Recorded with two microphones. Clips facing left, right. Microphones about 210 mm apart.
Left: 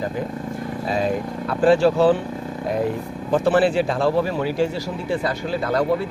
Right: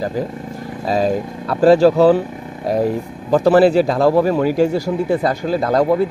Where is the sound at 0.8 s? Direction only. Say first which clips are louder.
Right 5 dB; 40° right (ahead or behind).